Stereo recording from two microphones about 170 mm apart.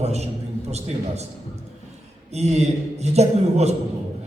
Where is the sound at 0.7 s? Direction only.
40° right (ahead or behind).